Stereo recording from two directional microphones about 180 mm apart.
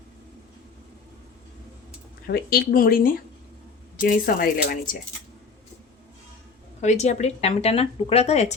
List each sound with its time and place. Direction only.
2.2 s speech: 60° left (ahead or behind)
6.8 s a woman's voice: 40° left (ahead or behind)